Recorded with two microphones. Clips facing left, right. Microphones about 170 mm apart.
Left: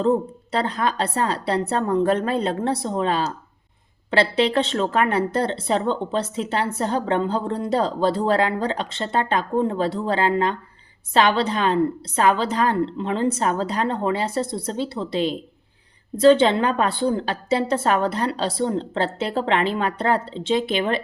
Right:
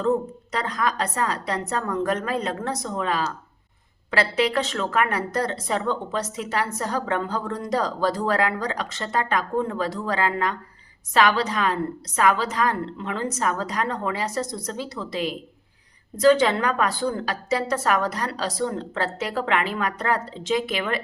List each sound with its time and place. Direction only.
0.5 s a woman's voice: 30° left (ahead or behind)